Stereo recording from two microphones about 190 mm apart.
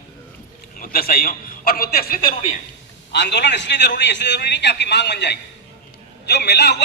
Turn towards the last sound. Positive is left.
turn(degrees=60)  # may be behind; listen again after turning